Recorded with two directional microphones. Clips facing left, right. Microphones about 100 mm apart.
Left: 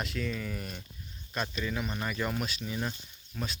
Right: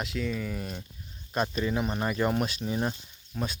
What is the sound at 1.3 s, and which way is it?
Speech, 35° right (ahead or behind).